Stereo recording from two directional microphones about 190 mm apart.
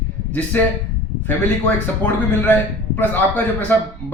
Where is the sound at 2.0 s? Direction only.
10° left (ahead or behind).